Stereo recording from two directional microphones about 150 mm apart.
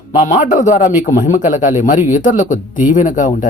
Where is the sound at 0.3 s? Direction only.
55° left (ahead or behind).